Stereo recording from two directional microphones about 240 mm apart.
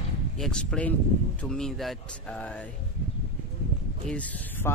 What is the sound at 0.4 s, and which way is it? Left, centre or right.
Speech, centre.